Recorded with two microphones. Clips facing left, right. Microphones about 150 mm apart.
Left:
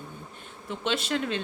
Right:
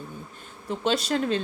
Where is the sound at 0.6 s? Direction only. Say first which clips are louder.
Right 4 dB; 40° right (ahead or behind).